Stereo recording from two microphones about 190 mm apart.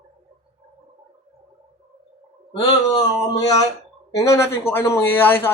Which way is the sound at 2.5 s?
25° left (ahead or behind).